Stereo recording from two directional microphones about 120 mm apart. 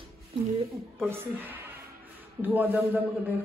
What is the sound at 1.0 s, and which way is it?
A woman's voice, 15° right (ahead or behind).